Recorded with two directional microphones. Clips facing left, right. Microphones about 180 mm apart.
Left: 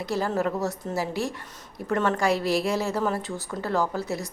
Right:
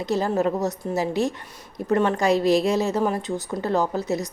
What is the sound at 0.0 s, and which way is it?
A woman's voice, 20° right (ahead or behind).